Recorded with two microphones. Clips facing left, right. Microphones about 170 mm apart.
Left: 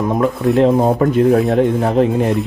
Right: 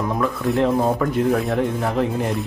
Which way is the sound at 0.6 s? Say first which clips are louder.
Left 6 dB; 20° left (ahead or behind).